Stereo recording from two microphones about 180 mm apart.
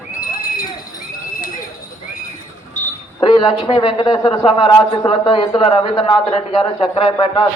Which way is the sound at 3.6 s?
30° left (ahead or behind).